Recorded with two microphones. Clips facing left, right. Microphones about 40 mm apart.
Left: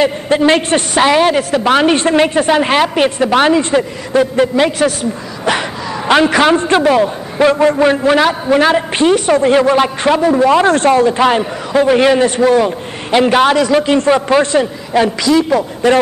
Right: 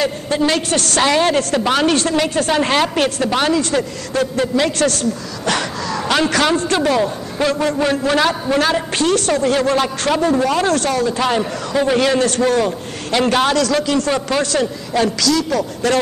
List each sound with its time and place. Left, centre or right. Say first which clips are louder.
0.0 s a man's voice: left 6 dB; left
10.5 s a man's voice: left 7 dB; left